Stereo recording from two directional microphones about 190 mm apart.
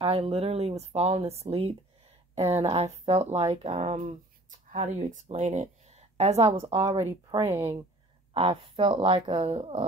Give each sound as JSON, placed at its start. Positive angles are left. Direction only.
{"t": 0.0, "sound": "speech", "side_deg": -30}
{"t": 7.2, "sound": "speech", "side_deg": -15}
{"t": 8.3, "sound": "speech", "side_deg": -30}